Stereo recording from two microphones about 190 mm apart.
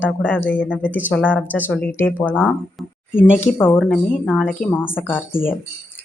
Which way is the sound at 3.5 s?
10° left (ahead or behind).